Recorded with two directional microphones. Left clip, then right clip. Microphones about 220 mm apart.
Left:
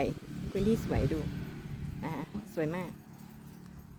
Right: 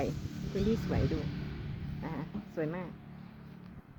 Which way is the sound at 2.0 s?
20° left (ahead or behind).